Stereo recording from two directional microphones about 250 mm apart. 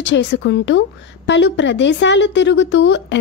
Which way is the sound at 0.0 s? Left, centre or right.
Left.